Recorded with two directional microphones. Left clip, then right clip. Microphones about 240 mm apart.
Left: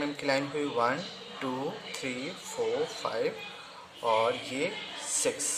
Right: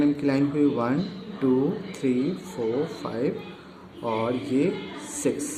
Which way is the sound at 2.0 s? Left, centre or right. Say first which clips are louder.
Right 12 dB; left.